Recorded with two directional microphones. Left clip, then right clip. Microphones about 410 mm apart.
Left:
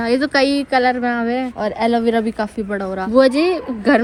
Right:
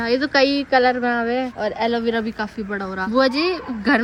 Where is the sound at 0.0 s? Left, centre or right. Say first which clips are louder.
Left 1 dB; centre.